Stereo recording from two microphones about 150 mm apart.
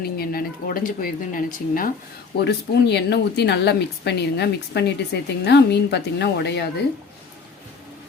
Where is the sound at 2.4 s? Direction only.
90° left.